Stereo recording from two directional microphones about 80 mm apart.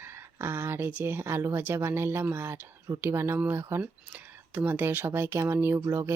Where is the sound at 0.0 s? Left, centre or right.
Right.